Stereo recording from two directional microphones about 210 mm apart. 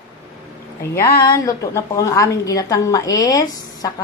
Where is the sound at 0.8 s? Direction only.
10° left (ahead or behind).